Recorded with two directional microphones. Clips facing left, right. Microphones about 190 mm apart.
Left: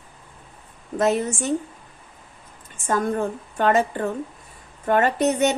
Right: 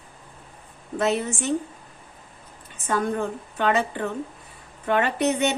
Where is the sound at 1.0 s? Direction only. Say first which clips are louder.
Left 3 dB; 45° left (ahead or behind).